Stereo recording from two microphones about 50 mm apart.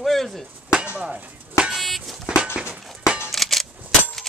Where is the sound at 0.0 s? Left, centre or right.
Centre.